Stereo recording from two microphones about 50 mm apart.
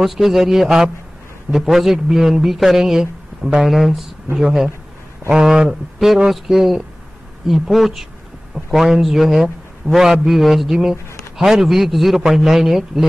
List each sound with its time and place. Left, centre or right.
0.0 s a man's voice: centre